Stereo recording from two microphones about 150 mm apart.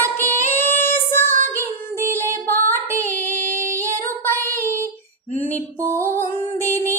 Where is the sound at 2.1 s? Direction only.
15° left (ahead or behind).